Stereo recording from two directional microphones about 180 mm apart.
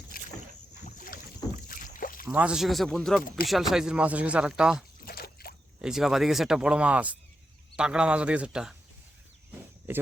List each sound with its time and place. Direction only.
0.1 s boat: 50° left (ahead or behind)
1.6 s rowboat: 50° left (ahead or behind)
2.2 s speech: 10° right (ahead or behind)
5.0 s a sound: 60° left (ahead or behind)
5.8 s speech: centre (ahead or behind)
9.6 s a sound: 10° right (ahead or behind)